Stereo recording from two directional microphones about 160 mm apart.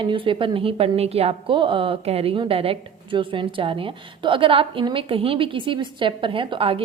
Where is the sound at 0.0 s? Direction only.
30° right (ahead or behind).